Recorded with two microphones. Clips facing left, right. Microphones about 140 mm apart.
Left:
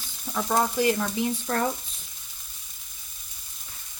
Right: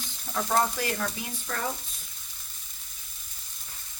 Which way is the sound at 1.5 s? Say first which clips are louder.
Left 6 dB; 40° left (ahead or behind).